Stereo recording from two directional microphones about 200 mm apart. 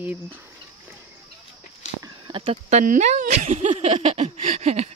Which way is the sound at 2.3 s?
30° right (ahead or behind).